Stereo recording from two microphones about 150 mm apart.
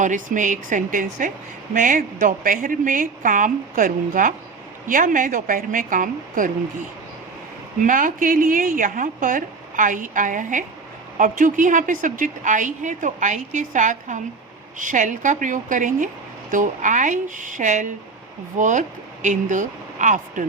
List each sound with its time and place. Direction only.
0.0 s a woman's voice: 55° right (ahead or behind)
7.8 s a woman's voice: 60° right (ahead or behind)